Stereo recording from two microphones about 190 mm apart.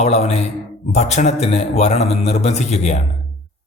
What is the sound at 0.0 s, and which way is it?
A man's voice, 35° left (ahead or behind).